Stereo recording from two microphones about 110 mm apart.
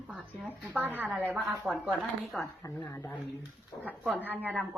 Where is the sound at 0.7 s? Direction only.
15° right (ahead or behind).